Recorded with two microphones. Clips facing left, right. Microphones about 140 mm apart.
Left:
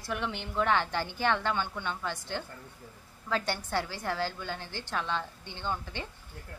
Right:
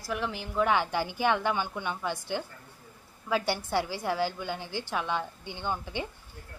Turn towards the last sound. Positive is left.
turn(degrees=-15)  # may be behind; listen again after turning